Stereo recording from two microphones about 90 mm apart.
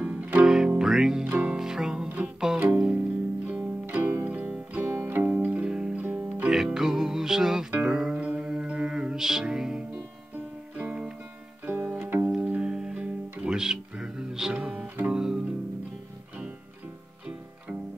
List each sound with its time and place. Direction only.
0.0 s music: 15° right (ahead or behind)
6.5 s music: 5° right (ahead or behind)